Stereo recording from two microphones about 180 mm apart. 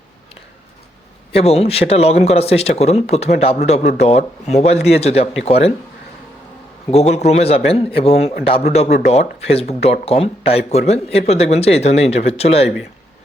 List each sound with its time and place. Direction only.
1.3 s speech: 35° left (ahead or behind)
6.9 s speech: 35° left (ahead or behind)